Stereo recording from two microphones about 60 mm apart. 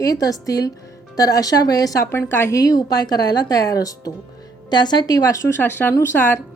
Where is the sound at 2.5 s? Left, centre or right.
Left.